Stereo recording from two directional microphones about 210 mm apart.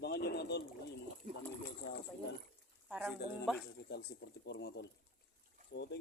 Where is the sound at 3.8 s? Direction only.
50° left (ahead or behind).